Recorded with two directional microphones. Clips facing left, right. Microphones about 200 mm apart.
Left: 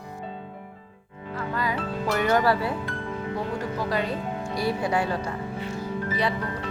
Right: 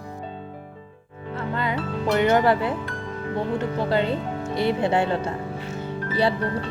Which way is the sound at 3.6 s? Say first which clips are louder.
Right 5 dB; 25° right (ahead or behind).